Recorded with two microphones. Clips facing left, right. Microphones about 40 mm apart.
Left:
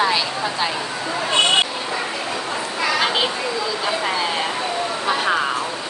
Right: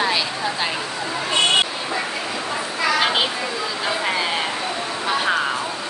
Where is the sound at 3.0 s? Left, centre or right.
Centre.